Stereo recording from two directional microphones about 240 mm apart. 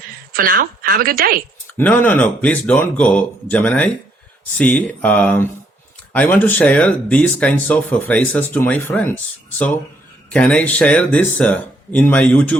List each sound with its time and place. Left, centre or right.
0.3 s a woman's voice: right
1.8 s speech: centre
10.2 s speech: centre